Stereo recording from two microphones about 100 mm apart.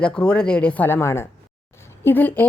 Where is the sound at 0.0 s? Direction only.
10° left (ahead or behind).